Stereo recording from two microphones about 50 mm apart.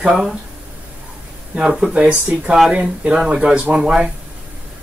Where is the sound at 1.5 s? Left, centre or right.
Centre.